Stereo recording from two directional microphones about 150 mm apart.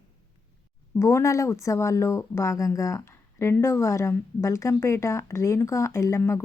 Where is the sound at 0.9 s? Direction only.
20° left (ahead or behind).